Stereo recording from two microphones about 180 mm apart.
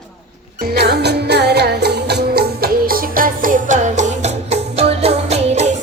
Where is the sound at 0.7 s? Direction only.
65° right (ahead or behind).